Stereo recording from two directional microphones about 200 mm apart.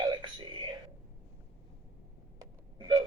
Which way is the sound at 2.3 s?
20° right (ahead or behind).